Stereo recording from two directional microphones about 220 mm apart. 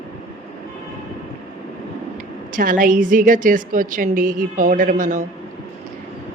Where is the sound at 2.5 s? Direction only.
40° right (ahead or behind).